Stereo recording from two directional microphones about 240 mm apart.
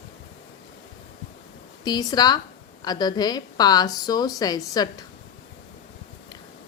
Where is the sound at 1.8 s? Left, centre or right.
Centre.